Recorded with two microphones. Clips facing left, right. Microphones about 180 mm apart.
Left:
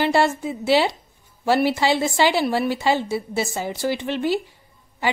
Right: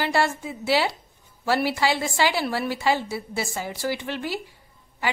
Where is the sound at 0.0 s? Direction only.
25° left (ahead or behind).